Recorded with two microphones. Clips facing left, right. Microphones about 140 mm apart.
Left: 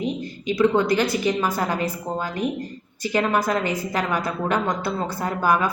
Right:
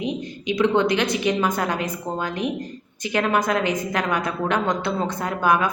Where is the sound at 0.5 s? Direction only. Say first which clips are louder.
Even; 5° left (ahead or behind).